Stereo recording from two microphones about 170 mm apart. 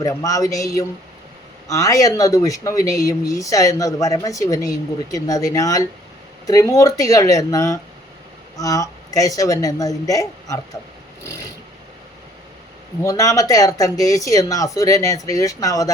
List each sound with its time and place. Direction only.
0.0 s speech: 20° left (ahead or behind)
13.0 s speech: 20° left (ahead or behind)